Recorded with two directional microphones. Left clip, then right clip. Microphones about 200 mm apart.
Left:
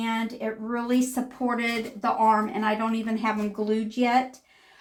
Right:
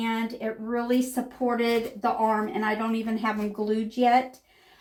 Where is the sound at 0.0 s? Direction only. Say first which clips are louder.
Even; 15° left (ahead or behind).